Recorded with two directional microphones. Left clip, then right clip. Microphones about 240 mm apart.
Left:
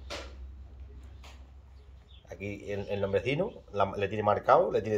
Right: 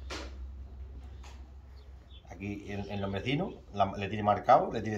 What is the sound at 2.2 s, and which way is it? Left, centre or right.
Speech, left.